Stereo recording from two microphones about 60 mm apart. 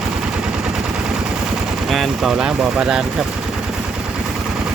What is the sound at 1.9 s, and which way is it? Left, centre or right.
Speech, centre.